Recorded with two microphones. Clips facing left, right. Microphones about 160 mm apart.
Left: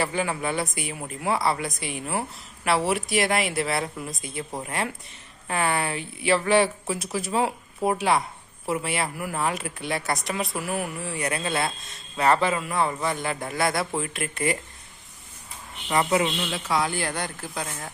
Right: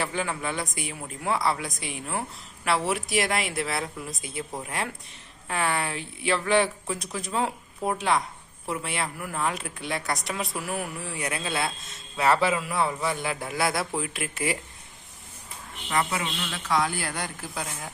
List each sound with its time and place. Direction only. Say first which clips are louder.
0.0 s speech: left 3 dB; 5° left (ahead or behind)
15.9 s a man's voice: left 5 dB; 20° left (ahead or behind)
16.7 s speech: even; centre (ahead or behind)